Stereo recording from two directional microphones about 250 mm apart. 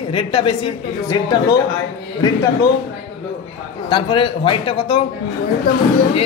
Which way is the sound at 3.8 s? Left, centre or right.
Centre.